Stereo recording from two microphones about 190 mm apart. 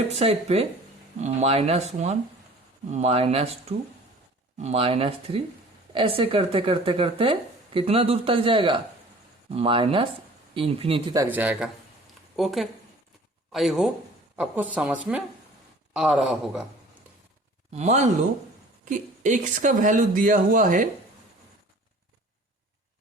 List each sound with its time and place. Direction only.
0.2 s speech: 30° right (ahead or behind)
11.1 s a woman's voice: 15° right (ahead or behind)
17.7 s speech: 35° right (ahead or behind)